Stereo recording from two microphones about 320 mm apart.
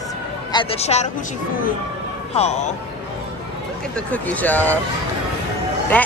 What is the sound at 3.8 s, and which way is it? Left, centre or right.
Speech, centre.